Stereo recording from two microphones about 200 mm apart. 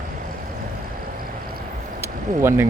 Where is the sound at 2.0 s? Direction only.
10° right (ahead or behind).